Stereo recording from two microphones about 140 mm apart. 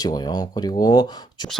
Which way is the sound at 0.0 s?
30° left (ahead or behind).